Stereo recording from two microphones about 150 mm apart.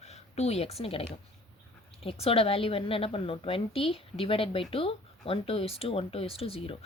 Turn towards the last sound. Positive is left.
turn(degrees=40)  # may be behind; listen again after turning